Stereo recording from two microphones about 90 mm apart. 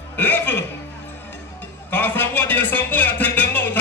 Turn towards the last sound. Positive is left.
turn(degrees=20)  # may be behind; listen again after turning